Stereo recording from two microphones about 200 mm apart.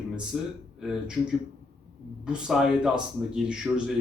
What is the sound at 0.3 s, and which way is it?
Speech, centre (ahead or behind).